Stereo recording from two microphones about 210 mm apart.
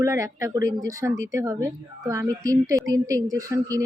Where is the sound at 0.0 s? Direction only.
15° right (ahead or behind).